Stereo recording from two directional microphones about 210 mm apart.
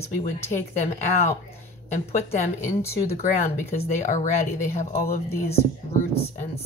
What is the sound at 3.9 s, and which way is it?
Speech, 35° left (ahead or behind).